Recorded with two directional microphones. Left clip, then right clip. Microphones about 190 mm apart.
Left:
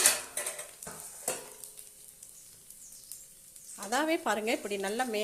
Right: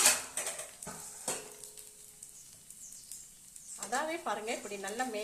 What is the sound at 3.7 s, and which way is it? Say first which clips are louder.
Speech: left 5 dB; 45° left (ahead or behind).